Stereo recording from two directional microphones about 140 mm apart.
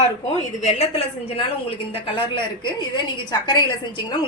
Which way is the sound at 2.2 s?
35° left (ahead or behind).